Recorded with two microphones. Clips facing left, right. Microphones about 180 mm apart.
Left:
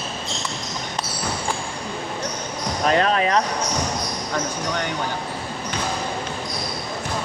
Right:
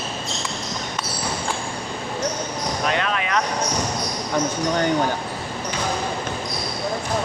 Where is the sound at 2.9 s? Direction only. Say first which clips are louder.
Left 7 dB; 35° left (ahead or behind).